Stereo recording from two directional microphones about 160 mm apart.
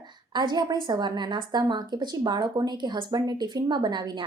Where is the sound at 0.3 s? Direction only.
25° right (ahead or behind).